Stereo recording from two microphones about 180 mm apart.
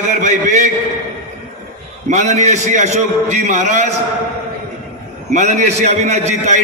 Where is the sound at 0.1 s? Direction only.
40° right (ahead or behind).